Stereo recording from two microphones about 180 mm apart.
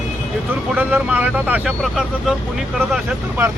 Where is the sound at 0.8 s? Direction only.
10° right (ahead or behind).